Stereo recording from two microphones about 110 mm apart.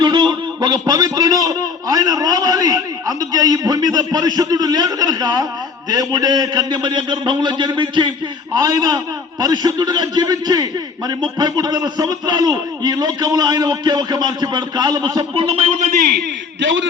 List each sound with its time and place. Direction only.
0.0 s a man's voice: 40° right (ahead or behind)
15.4 s a man's voice: 65° right (ahead or behind)